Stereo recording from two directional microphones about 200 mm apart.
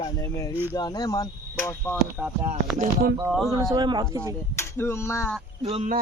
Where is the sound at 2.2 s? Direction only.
5° right (ahead or behind).